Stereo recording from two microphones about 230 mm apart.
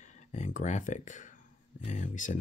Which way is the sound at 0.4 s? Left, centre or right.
Left.